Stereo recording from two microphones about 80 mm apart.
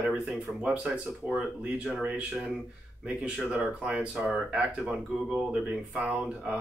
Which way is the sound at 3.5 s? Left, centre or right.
Centre.